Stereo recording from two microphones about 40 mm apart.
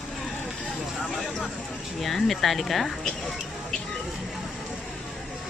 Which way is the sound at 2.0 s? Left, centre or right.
Centre.